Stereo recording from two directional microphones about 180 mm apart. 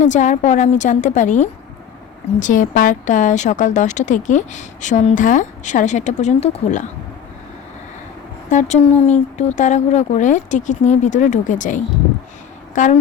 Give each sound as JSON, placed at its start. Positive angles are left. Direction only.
{"t": 0.0, "sound": "a woman's voice", "side_deg": 45}
{"t": 8.4, "sound": "a woman's voice", "side_deg": 40}